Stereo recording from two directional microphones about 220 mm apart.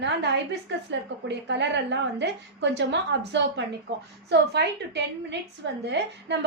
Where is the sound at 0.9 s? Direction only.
50° right (ahead or behind).